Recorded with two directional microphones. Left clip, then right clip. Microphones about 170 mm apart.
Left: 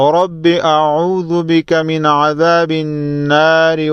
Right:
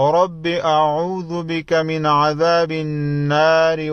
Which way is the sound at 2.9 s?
15° left (ahead or behind).